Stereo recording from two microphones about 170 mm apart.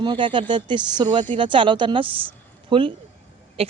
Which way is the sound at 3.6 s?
35° right (ahead or behind).